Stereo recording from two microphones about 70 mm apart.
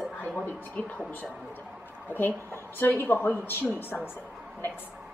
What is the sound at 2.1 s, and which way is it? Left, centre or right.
A woman's voice, left.